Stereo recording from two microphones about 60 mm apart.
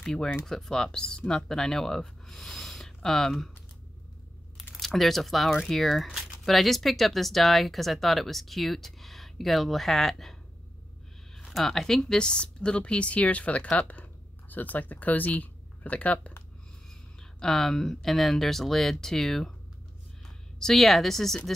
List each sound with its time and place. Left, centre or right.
0.0 s speech: centre
4.7 s speech: centre
11.3 s speech: centre; by 16.3 s left
17.2 s speech: centre
20.5 s speech: centre